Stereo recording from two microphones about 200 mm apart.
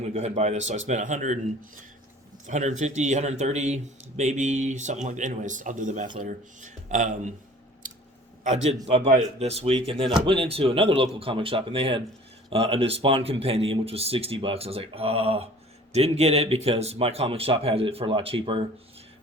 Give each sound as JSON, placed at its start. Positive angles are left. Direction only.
{"t": 0.1, "sound": "speech", "side_deg": -35}
{"t": 2.5, "sound": "speech", "side_deg": -35}
{"t": 8.4, "sound": "speech", "side_deg": -30}